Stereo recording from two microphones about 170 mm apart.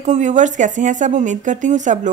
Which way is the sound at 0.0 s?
45° right (ahead or behind).